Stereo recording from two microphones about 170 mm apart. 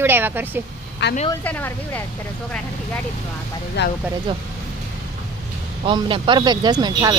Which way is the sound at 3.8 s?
90° left.